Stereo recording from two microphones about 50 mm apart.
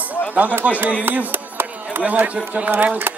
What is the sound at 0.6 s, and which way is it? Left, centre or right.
A man's voice, right.